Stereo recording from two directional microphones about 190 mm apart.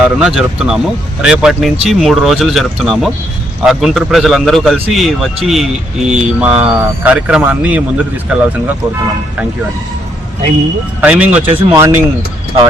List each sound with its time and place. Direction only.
0.0 s speech: 5° right (ahead or behind)
11.0 s speech: 5° right (ahead or behind)
11.4 s speech: 20° right (ahead or behind)